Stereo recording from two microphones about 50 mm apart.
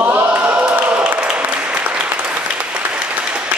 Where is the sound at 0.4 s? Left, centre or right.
Right.